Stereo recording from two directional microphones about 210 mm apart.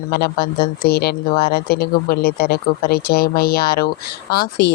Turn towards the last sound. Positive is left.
turn(degrees=45)  # may be behind; listen again after turning